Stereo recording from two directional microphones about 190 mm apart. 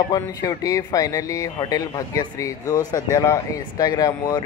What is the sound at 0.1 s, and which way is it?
Speech, 20° left (ahead or behind).